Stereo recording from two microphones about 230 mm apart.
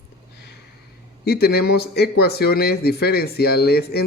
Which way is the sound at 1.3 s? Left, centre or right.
Left.